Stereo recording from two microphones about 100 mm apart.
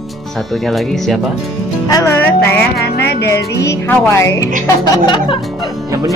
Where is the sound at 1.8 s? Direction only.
40° left (ahead or behind).